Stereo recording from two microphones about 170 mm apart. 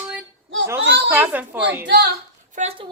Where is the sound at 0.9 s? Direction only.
90° right.